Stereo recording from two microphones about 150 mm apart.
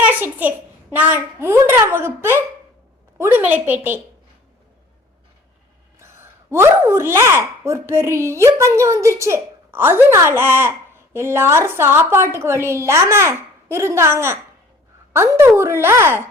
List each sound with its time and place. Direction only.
0.1 s speech: 10° right (ahead or behind)
6.0 s speech: 15° right (ahead or behind)